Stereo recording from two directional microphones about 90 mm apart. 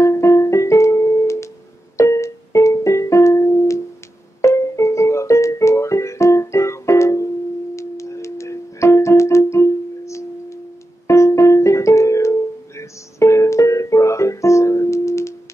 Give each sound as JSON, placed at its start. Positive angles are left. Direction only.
{"t": 0.0, "sound": "music", "side_deg": 35}